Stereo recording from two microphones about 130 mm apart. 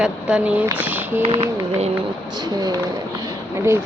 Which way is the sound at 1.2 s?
50° right (ahead or behind).